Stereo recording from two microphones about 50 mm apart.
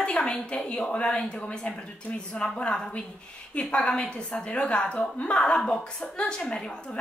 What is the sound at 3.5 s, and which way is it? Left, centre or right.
A woman's voice, left.